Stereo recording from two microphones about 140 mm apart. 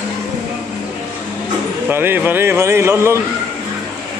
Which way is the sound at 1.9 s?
15° right (ahead or behind).